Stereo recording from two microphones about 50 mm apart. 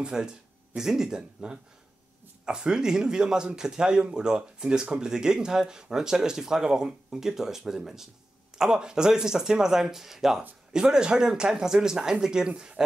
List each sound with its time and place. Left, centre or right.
0.0 s speech: centre